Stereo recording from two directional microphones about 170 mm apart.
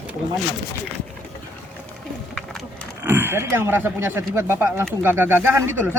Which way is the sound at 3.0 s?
15° right (ahead or behind).